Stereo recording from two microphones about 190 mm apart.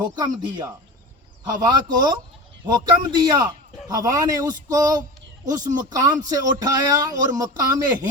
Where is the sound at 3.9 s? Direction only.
20° right (ahead or behind).